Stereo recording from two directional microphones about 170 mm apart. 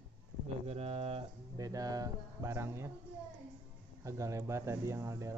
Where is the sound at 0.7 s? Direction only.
35° right (ahead or behind).